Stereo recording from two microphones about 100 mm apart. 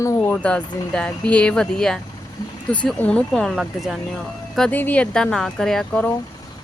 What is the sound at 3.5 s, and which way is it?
Speech, 5° right (ahead or behind).